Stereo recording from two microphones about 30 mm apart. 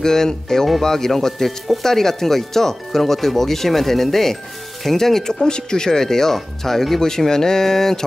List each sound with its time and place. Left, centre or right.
0.0 s speech: centre